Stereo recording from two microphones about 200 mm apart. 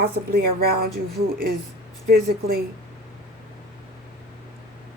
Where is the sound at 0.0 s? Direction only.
50° right (ahead or behind).